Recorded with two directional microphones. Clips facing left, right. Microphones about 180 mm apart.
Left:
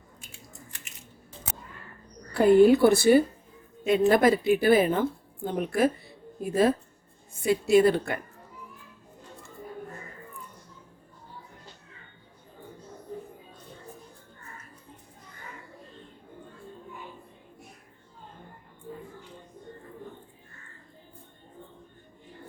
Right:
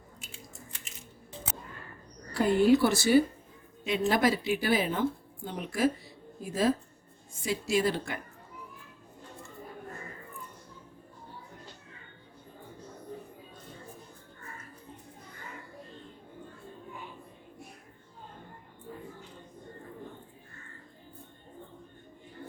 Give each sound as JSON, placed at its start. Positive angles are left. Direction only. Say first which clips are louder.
{"t": 2.3, "sound": "a woman's voice", "louder": "left 6 dB", "side_deg": 55}